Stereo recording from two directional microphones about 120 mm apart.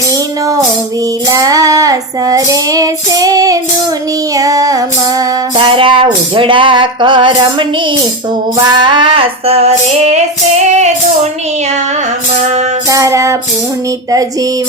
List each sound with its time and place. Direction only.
0.1 s music: 30° right (ahead or behind)
1.3 s child singing: 30° right (ahead or behind)
5.5 s music: 45° right (ahead or behind); by 10.9 s 70° right (ahead or behind)
12.9 s child singing: 25° right (ahead or behind)